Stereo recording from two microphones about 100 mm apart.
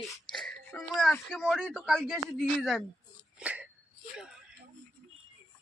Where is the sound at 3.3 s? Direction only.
10° right (ahead or behind).